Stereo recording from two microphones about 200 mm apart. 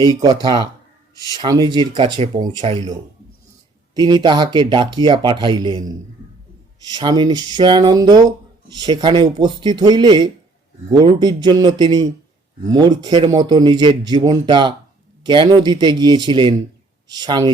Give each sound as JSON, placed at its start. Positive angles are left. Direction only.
{"t": 0.0, "sound": "speech", "side_deg": -20}
{"t": 3.9, "sound": "speech", "side_deg": -20}
{"t": 6.9, "sound": "speech", "side_deg": -20}